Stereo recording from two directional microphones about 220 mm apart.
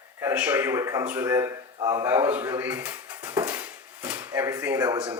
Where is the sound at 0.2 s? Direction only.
10° right (ahead or behind).